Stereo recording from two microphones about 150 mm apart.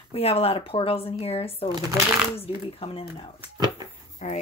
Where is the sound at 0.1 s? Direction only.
40° left (ahead or behind).